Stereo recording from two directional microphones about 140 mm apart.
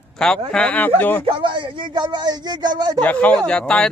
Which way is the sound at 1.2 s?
40° right (ahead or behind).